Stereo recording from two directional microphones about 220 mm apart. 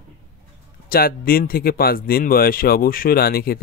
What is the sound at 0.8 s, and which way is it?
Speech, 40° left (ahead or behind).